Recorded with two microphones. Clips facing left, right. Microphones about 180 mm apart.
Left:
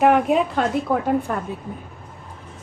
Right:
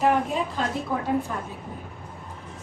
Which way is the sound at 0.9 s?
55° left (ahead or behind).